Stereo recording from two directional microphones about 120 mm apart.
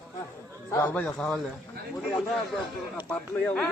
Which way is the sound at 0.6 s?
25° left (ahead or behind).